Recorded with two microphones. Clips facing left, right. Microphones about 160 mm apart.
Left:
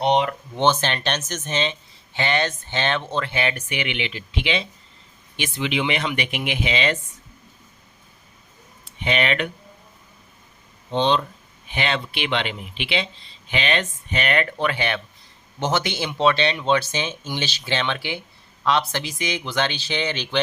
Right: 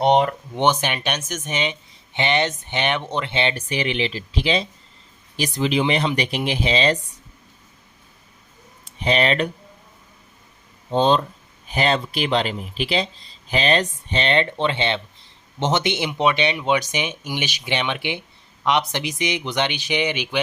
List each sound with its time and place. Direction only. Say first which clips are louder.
0.0 s speech: right 3 dB; 45° right (ahead or behind)
0.5 s speech: left 1 dB; 15° right (ahead or behind); by 7.0 s 35° right (ahead or behind)
8.8 s speech: right 3 dB; 35° right (ahead or behind)
10.9 s speech: right 3 dB; 40° right (ahead or behind); by 20.4 s 10° right (ahead or behind)